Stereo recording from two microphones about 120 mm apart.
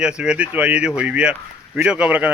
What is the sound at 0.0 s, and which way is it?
Speech, 10° right (ahead or behind).